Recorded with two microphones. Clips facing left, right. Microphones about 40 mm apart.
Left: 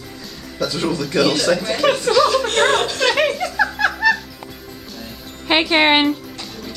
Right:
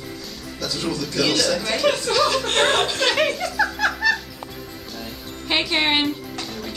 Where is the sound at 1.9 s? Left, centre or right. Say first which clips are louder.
Left 5 dB; left.